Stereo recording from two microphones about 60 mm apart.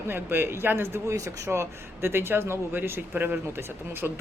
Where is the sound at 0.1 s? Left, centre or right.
Right.